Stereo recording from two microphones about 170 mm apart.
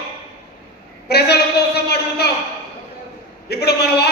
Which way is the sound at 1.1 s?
70° left (ahead or behind).